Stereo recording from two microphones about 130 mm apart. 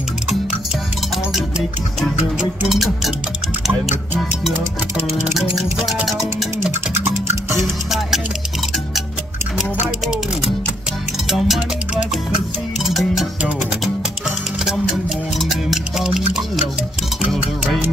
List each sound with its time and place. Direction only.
2.7 s music: centre (ahead or behind)
5.3 s music: centre (ahead or behind)
6.6 s music: 20° right (ahead or behind)
7.6 s music: centre (ahead or behind)
11.2 s music: centre (ahead or behind)
15.3 s music: centre (ahead or behind)